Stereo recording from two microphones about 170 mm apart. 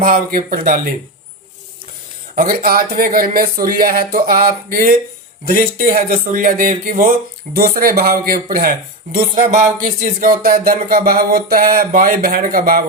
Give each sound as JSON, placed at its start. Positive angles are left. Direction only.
{"t": 0.0, "sound": "speech", "side_deg": -55}
{"t": 2.3, "sound": "speech", "side_deg": -60}